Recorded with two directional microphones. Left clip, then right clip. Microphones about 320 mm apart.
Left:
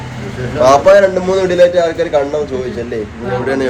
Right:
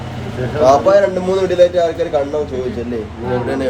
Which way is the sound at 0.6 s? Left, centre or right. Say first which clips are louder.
Left 3 dB; left.